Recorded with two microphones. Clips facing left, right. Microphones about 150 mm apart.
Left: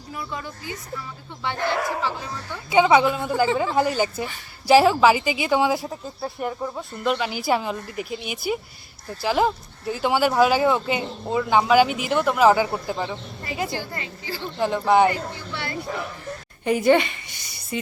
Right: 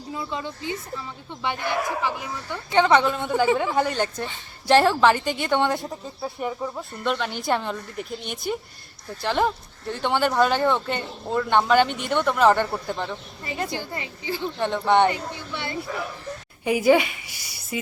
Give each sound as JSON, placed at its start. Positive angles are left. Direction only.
{"t": 0.1, "sound": "speech", "side_deg": -20}
{"t": 2.6, "sound": "speech", "side_deg": 10}
{"t": 13.7, "sound": "speech", "side_deg": -20}
{"t": 14.6, "sound": "speech", "side_deg": 5}
{"t": 15.3, "sound": "speech", "side_deg": -20}
{"t": 16.6, "sound": "a woman's voice", "side_deg": -5}